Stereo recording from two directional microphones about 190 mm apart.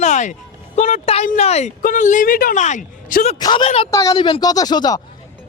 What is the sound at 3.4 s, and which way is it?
Speech, 20° left (ahead or behind).